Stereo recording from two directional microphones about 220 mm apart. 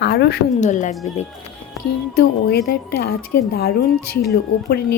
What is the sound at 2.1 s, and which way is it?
A woman's voice, 45° left (ahead or behind).